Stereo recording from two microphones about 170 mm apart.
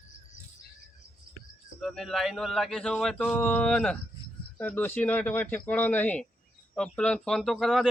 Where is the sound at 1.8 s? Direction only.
Centre (ahead or behind).